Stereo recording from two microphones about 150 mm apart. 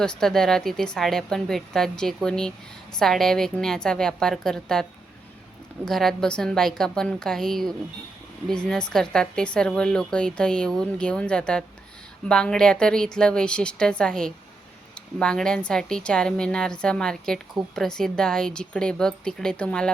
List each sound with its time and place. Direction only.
0.0 s speech: 5° left (ahead or behind)